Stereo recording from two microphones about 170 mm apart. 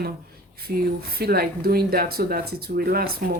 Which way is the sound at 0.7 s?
65° right (ahead or behind).